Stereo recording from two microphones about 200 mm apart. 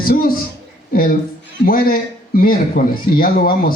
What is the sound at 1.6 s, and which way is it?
Speech, 45° left (ahead or behind).